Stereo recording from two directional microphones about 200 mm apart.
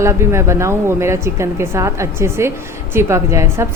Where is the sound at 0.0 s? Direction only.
15° right (ahead or behind).